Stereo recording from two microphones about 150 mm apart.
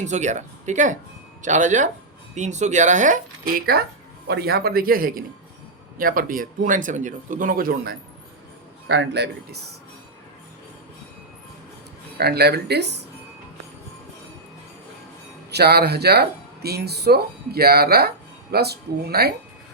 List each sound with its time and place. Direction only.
0.0 s speech: 50° right (ahead or behind); by 3.8 s 80° right
4.3 s a man's voice: 90° right
9.2 s speech: 90° right
12.1 s speech: 90° right
15.4 s speech: 90° right